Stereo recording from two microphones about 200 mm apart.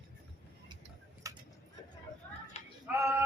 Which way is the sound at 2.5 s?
35° left (ahead or behind).